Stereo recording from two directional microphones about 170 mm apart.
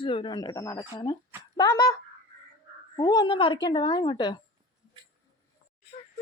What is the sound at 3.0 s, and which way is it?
Speech, 25° left (ahead or behind).